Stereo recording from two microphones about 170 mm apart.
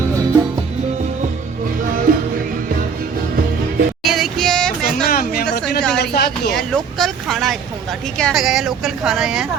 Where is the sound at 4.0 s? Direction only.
Centre (ahead or behind).